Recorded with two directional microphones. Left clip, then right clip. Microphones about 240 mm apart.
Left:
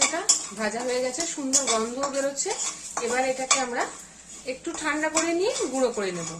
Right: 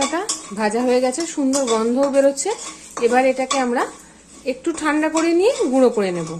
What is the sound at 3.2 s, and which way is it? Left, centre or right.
A woman's voice, right.